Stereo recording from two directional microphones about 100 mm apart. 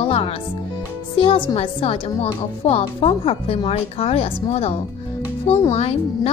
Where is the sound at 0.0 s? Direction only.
70° left (ahead or behind).